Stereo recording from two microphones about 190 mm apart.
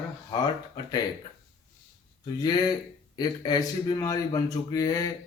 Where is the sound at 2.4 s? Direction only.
20° left (ahead or behind).